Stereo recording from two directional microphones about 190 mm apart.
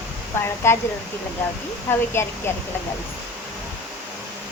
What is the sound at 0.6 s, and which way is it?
Speech, 15° left (ahead or behind).